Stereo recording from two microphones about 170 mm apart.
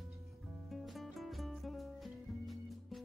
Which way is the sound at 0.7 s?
Centre (ahead or behind).